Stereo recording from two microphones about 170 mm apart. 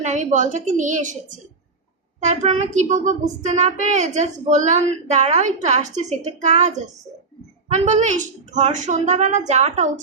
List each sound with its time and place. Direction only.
0.0 s a child's voice: 45° right (ahead or behind)